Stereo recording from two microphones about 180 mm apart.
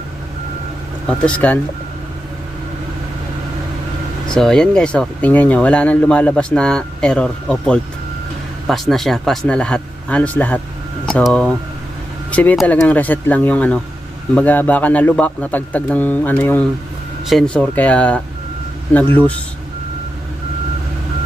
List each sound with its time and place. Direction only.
1.0 s speech: 5° left (ahead or behind)
4.3 s speech: 5° left (ahead or behind)